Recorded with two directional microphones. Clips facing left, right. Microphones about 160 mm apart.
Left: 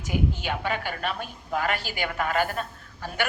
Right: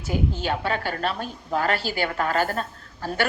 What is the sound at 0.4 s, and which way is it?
A woman's voice, 40° right (ahead or behind).